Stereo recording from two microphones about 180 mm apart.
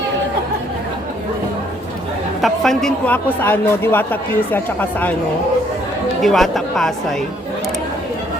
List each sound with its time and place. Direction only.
2.4 s speech: centre (ahead or behind)
6.2 s speech: centre (ahead or behind)